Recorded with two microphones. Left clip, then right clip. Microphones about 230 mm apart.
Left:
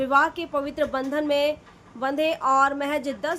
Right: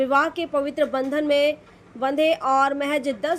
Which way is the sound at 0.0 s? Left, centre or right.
Centre.